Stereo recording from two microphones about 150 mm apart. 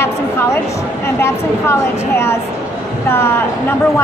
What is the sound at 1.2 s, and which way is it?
Speech, 15° left (ahead or behind).